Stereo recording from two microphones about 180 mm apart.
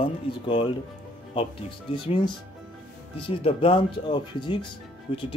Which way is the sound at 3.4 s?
30° left (ahead or behind).